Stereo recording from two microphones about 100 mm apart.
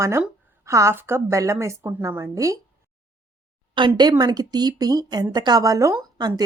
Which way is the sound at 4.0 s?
45° right (ahead or behind).